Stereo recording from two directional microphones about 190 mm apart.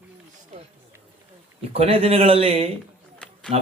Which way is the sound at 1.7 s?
30° right (ahead or behind).